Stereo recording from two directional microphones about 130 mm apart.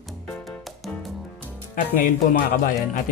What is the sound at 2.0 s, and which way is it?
Speech, 90° left.